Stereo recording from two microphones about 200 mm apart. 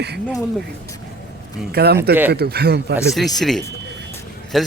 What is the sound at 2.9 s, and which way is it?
Speech, centre (ahead or behind).